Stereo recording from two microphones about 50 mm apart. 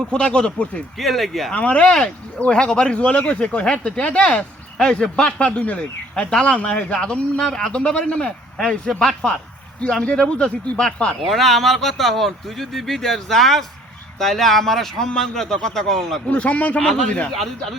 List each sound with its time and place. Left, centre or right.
0.1 s speech: left
0.9 s speech: centre
1.5 s speech: left; by 7.7 s centre
7.7 s speech: centre
10.0 s speech: left
11.2 s speech: centre
16.3 s speech: left
16.8 s speech: centre
17.3 s speech: centre